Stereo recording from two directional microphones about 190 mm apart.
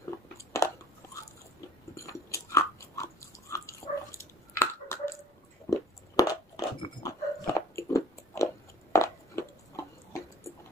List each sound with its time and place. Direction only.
0.0 s chewing: 15° left (ahead or behind)
2.0 s biting: 15° left (ahead or behind)
4.6 s chewing: 15° left (ahead or behind)
5.7 s dog: 20° left (ahead or behind)
8.9 s a sound: 15° left (ahead or behind)